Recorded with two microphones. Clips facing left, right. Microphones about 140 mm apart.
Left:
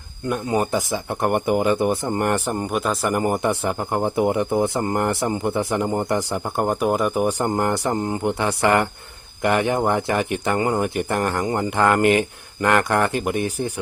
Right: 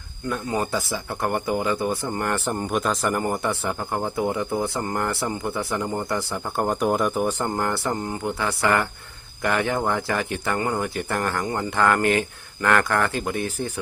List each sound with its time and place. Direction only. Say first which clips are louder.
0.3 s speech: left 4 dB; 20° left (ahead or behind)
2.6 s speech: even; 5° left (ahead or behind)